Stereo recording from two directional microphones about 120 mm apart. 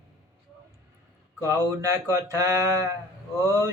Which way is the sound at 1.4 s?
20° right (ahead or behind).